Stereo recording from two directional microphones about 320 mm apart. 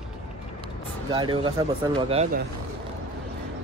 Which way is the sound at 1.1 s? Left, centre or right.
Centre.